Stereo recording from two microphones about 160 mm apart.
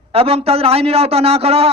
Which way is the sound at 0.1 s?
35° right (ahead or behind).